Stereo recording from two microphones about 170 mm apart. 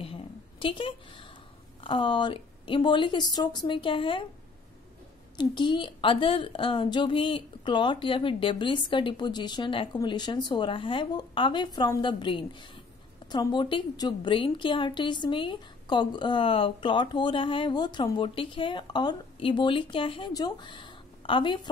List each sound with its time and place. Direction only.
0.0 s a sound: 35° left (ahead or behind)
1.8 s a woman's voice: 30° left (ahead or behind)
5.4 s a woman's voice: 25° left (ahead or behind)